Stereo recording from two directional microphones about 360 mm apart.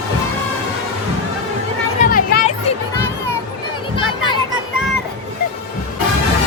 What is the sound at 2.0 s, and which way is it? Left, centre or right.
Music, left.